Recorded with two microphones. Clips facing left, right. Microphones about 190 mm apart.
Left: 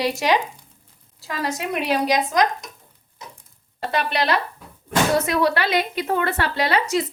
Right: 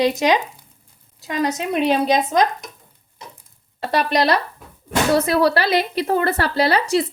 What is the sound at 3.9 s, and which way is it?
A woman's voice, 40° right (ahead or behind).